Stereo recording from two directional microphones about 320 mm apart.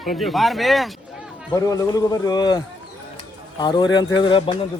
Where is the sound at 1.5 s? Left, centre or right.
Centre.